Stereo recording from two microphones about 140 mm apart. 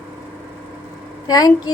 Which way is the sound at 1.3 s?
30° left (ahead or behind).